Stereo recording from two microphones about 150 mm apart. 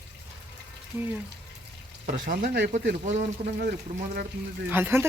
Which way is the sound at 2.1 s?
70° right (ahead or behind).